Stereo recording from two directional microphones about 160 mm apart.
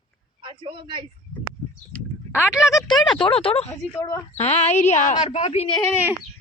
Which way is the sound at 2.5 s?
5° right (ahead or behind).